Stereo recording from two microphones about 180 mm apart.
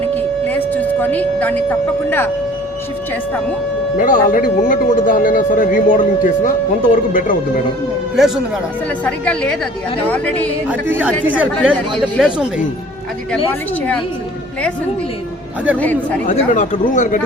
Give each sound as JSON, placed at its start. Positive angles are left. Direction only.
{"t": 0.1, "sound": "a sound", "side_deg": 10}
{"t": 2.0, "sound": "speech", "side_deg": 10}
{"t": 3.9, "sound": "speech", "side_deg": 50}
{"t": 9.0, "sound": "speech", "side_deg": 5}
{"t": 10.7, "sound": "speech", "side_deg": -10}
{"t": 15.8, "sound": "speech", "side_deg": 10}
{"t": 16.3, "sound": "speech", "side_deg": 45}